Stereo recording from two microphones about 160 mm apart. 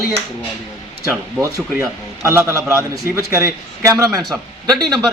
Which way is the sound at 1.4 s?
15° right (ahead or behind).